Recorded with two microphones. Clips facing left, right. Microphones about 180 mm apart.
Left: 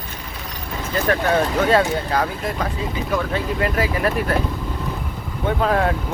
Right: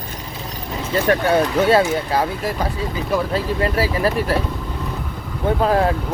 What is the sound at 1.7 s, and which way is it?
Speech, 30° right (ahead or behind).